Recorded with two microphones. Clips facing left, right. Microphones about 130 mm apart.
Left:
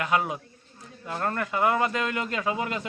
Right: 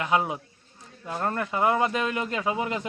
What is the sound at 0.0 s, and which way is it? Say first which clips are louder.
Speech: right 1 dB; 20° right (ahead or behind).